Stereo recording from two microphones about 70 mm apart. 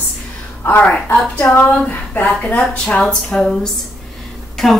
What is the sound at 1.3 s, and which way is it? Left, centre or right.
A woman's voice, left.